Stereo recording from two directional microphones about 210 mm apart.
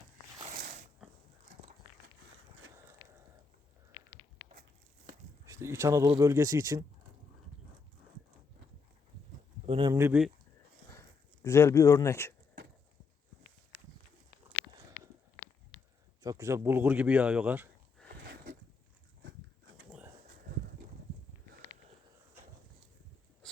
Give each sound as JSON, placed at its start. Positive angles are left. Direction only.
{"t": 1.0, "sound": "dog", "side_deg": -5}
{"t": 5.5, "sound": "speech", "side_deg": -15}
{"t": 9.6, "sound": "a sound", "side_deg": -25}
{"t": 9.9, "sound": "speech", "side_deg": -10}
{"t": 11.4, "sound": "speech", "side_deg": 15}
{"t": 16.2, "sound": "speech", "side_deg": -15}
{"t": 18.1, "sound": "a sound", "side_deg": -55}